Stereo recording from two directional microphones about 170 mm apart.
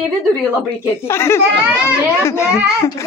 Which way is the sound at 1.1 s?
15° left (ahead or behind).